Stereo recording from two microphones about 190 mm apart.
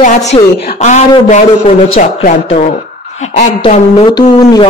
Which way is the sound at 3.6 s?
30° left (ahead or behind).